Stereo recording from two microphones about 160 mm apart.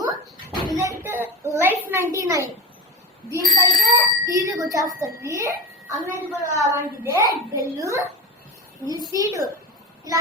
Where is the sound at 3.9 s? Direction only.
20° right (ahead or behind).